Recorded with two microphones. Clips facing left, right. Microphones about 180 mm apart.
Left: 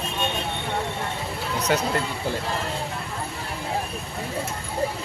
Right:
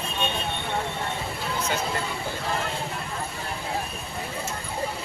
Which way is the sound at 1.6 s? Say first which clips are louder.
Left 6 dB; 75° left (ahead or behind).